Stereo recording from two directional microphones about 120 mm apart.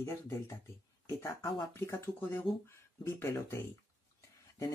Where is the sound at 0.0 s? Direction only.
25° left (ahead or behind).